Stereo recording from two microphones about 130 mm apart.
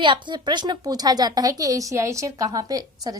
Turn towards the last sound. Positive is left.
turn(degrees=-30)  # may be behind; listen again after turning